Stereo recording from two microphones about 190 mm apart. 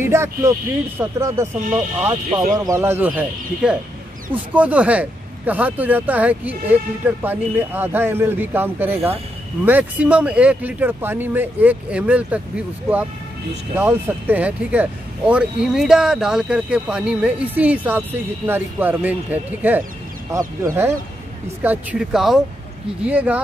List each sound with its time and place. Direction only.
0.0 s speech: 15° right (ahead or behind)
21.6 s speech: 5° right (ahead or behind)